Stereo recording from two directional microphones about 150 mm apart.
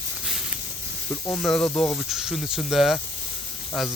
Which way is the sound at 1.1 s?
15° left (ahead or behind).